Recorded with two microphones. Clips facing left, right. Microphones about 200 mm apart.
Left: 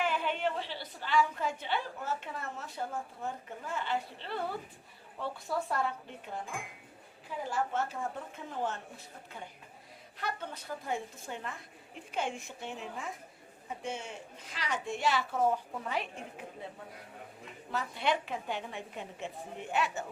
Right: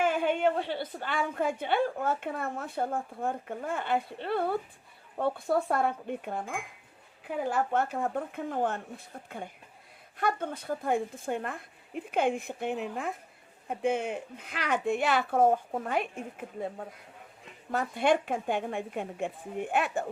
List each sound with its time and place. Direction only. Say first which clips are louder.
0.0 s a woman's voice: right 6 dB; 50° right (ahead or behind)
10.2 s a woman's voice: right 8 dB; 50° right (ahead or behind)